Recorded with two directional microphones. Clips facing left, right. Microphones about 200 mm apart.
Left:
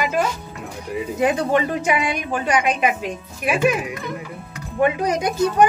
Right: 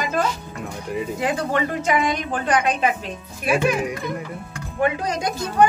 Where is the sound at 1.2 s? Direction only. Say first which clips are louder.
Left 5 dB; 20° left (ahead or behind).